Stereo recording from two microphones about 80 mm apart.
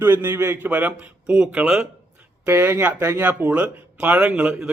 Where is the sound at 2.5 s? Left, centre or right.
Right.